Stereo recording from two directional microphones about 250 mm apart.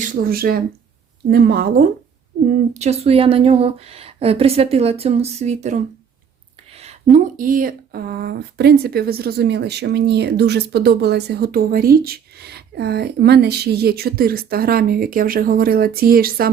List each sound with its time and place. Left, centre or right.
0.0 s speech: right
2.5 s speech: right